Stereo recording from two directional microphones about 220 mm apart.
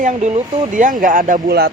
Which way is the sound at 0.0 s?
30° right (ahead or behind).